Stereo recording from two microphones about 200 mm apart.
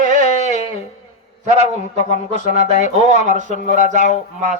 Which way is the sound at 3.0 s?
35° right (ahead or behind).